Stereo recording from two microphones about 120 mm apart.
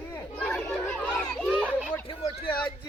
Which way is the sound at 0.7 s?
5° left (ahead or behind).